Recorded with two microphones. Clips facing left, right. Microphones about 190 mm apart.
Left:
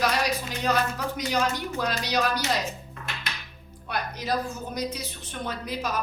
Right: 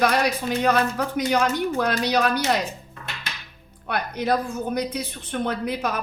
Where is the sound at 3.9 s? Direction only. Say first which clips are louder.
Right 5 dB; 55° right (ahead or behind).